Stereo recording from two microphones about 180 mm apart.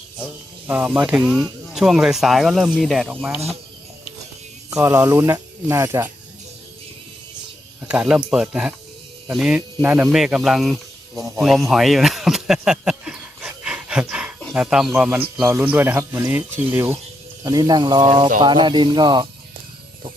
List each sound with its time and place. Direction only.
0.7 s speech: 10° right (ahead or behind)
4.7 s a man's voice: 15° right (ahead or behind)
7.8 s a man's voice: 5° right (ahead or behind); by 19.3 s 25° right (ahead or behind)